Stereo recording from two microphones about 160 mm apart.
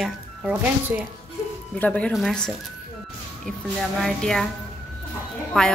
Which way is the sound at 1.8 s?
5° left (ahead or behind).